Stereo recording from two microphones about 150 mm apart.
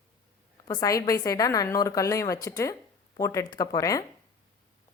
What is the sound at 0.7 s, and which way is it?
Speech, 25° left (ahead or behind).